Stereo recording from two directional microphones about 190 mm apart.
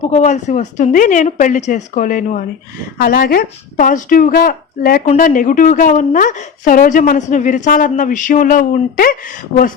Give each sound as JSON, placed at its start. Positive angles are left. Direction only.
{"t": 0.1, "sound": "speech", "side_deg": 40}